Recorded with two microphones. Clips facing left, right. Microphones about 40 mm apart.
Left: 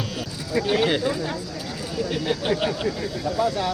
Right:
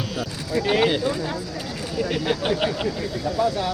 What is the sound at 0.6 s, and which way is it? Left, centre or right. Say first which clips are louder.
Speech: right 2 dB; centre.